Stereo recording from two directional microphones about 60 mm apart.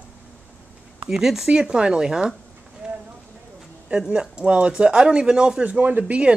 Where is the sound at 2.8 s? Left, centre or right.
Centre.